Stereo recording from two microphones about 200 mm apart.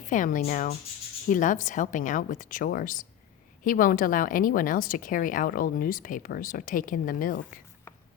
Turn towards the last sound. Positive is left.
turn(degrees=45)  # may be behind; listen again after turning